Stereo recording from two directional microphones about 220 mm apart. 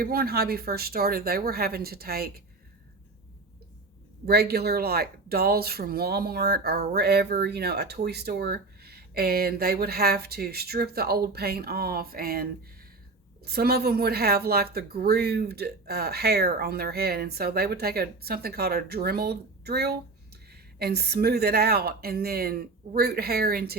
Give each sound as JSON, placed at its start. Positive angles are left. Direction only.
{"t": 0.0, "sound": "speech", "side_deg": -45}
{"t": 4.3, "sound": "speech", "side_deg": -45}